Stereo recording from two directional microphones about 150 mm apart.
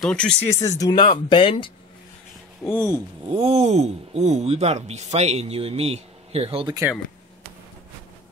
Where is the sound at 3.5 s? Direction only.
45° right (ahead or behind).